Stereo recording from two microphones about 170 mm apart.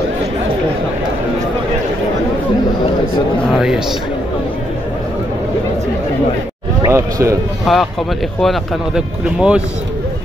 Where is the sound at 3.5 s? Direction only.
Centre (ahead or behind).